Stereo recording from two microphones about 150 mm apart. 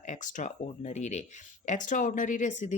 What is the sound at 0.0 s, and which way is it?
Speech, 55° left (ahead or behind).